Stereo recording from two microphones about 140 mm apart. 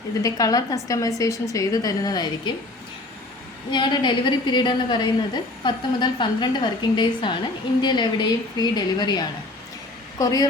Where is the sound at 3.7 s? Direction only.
30° left (ahead or behind).